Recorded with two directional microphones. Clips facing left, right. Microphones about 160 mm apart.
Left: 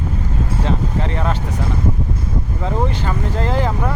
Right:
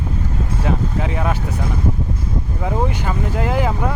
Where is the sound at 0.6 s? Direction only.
10° right (ahead or behind).